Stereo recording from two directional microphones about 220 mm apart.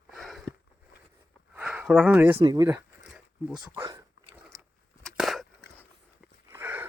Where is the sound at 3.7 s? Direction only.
10° right (ahead or behind).